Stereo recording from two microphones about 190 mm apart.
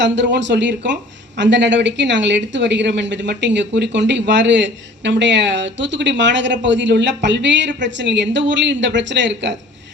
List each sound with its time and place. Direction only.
0.0 s speech: 70° right (ahead or behind)